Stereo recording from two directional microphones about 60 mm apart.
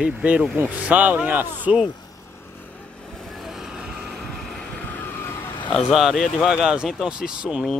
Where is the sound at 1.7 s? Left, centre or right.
Centre.